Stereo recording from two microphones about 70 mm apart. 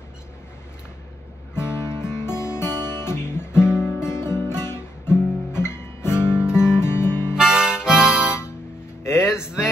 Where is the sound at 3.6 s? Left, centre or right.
Centre.